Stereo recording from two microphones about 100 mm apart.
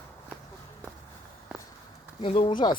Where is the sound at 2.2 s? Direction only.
60° left (ahead or behind).